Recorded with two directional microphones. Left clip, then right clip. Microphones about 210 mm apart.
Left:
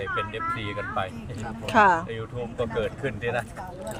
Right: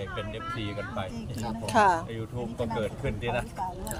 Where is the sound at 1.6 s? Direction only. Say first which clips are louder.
Left 4 dB; 20° left (ahead or behind).